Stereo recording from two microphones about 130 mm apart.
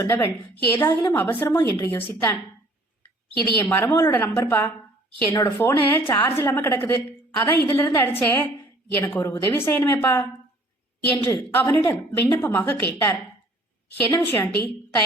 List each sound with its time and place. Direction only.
0.1 s a woman's voice: 15° left (ahead or behind)
3.6 s a woman's voice: 15° left (ahead or behind)
11.3 s a woman's voice: 20° left (ahead or behind)